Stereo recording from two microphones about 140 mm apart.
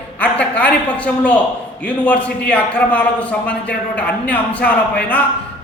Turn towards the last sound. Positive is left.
turn(degrees=10)  # may be behind; listen again after turning